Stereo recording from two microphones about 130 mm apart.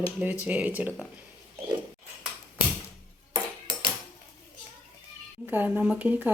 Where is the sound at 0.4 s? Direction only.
10° right (ahead or behind).